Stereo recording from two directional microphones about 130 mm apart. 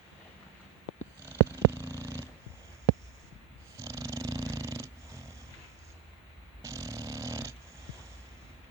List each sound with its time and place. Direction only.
1.2 s purr: 20° right (ahead or behind)
3.8 s purr: 25° right (ahead or behind)
6.6 s dog: 25° right (ahead or behind)